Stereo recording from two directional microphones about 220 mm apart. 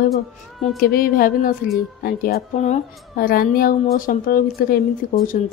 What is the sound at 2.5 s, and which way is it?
A woman's voice, 30° left (ahead or behind).